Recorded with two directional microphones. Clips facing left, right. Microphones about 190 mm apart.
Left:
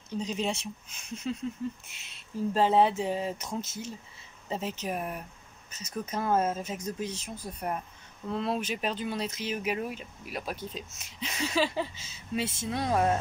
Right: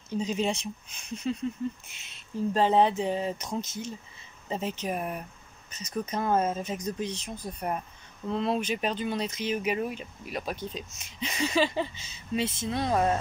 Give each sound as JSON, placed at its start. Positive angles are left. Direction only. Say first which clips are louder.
{"t": 0.2, "sound": "speech", "louder": "right 3 dB", "side_deg": 0}